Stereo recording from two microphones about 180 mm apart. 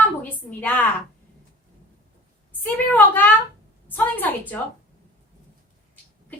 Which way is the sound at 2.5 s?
10° left (ahead or behind).